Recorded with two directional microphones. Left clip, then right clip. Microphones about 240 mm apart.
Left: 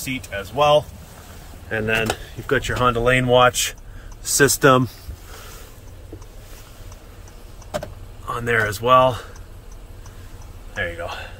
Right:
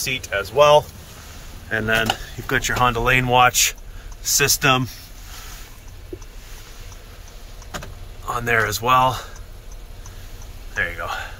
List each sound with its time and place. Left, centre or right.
0.0 s speech: centre
4.2 s speech: left
8.3 s speech: centre
10.7 s speech: centre